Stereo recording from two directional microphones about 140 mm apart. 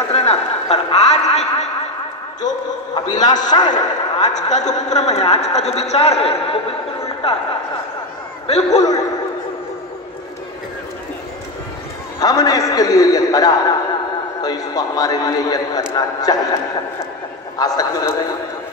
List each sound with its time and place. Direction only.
0.1 s a sound: 50° left (ahead or behind)
3.4 s a man's voice: 30° left (ahead or behind)
4.3 s a man's voice: 55° left (ahead or behind)
8.5 s a man's voice: 50° left (ahead or behind)
12.2 s a man's voice: 25° left (ahead or behind)
17.6 s a man's voice: 25° left (ahead or behind)